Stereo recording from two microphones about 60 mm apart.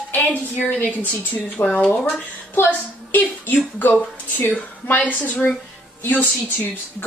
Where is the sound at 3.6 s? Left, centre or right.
Left.